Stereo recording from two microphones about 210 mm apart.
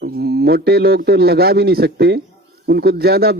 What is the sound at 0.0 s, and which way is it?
A man's voice, 45° right (ahead or behind).